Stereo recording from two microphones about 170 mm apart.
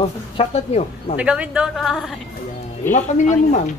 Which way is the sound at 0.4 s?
35° left (ahead or behind).